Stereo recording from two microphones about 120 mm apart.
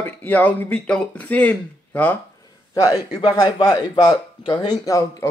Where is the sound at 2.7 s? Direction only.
30° left (ahead or behind).